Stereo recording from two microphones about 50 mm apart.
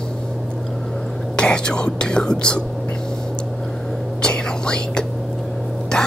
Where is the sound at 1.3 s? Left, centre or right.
Centre.